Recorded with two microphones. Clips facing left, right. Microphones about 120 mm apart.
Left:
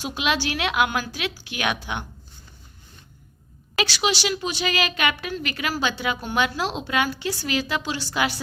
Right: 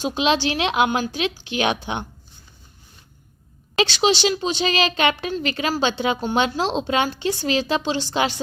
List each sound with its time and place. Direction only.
0.0 s a woman's voice: 25° right (ahead or behind)
3.8 s a woman's voice: 25° right (ahead or behind)